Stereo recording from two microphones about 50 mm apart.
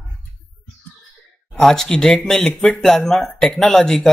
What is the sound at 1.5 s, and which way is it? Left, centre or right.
Speech, centre.